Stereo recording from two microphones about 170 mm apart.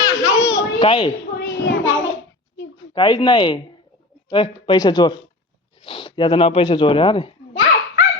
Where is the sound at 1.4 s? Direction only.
75° left (ahead or behind).